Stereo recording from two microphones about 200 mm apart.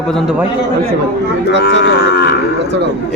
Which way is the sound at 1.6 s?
55° left (ahead or behind).